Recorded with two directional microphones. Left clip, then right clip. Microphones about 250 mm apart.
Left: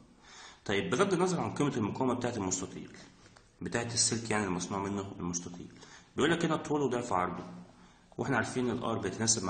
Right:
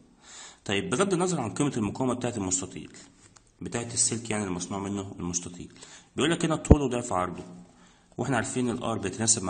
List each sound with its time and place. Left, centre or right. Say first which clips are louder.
0.3 s speech: right 3 dB; right